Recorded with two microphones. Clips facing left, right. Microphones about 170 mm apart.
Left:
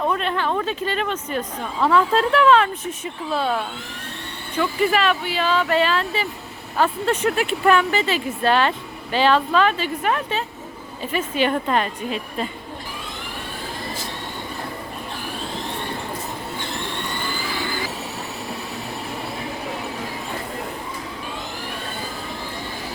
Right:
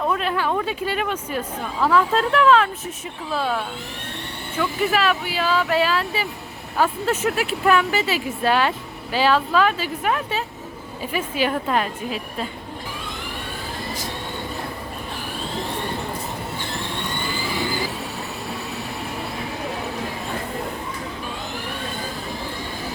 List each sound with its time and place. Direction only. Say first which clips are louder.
0.0 s speech: even; centre (ahead or behind)